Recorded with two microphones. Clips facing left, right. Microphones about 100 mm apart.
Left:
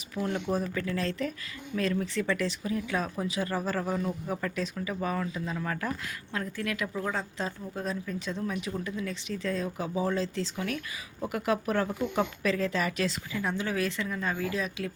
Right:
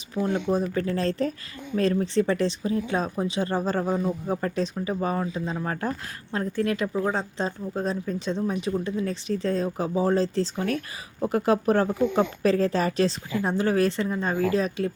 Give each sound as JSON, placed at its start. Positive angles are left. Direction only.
{"t": 0.1, "sound": "speech", "side_deg": -30}
{"t": 0.7, "sound": "speech", "side_deg": -35}